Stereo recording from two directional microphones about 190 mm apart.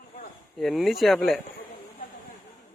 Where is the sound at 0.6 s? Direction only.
Centre (ahead or behind).